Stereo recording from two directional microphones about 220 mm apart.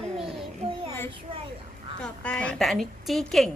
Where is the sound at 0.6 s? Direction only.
25° right (ahead or behind).